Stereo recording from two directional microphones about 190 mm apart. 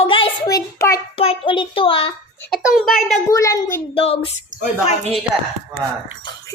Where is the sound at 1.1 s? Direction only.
30° left (ahead or behind).